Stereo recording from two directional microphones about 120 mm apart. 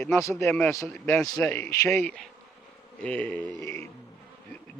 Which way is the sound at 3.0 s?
10° left (ahead or behind).